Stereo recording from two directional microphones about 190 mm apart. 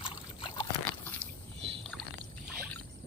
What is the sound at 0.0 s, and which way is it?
Boat, 25° left (ahead or behind).